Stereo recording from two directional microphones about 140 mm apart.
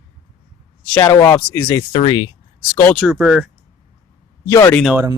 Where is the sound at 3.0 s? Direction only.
5° right (ahead or behind).